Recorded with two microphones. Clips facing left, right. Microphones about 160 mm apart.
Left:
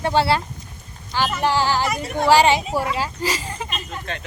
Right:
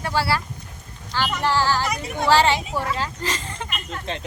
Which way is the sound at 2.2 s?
15° left (ahead or behind).